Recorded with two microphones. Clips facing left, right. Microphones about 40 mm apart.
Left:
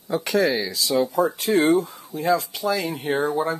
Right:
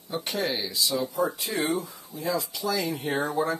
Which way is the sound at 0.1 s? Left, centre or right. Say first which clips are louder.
Left 8 dB; left.